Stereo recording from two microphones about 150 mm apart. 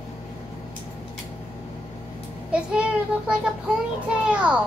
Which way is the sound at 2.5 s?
5° right (ahead or behind).